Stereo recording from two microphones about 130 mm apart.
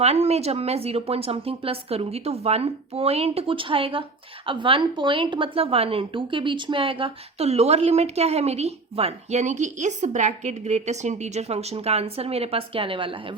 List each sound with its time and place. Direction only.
0.0 s speech: 55° right (ahead or behind)